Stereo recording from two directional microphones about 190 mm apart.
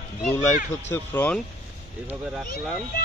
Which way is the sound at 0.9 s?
10° left (ahead or behind).